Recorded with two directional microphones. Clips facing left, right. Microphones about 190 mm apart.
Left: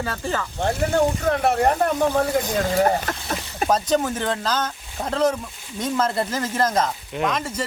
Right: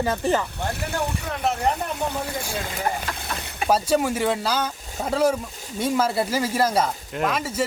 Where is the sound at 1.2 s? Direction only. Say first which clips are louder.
Left 5 dB; 60° left (ahead or behind).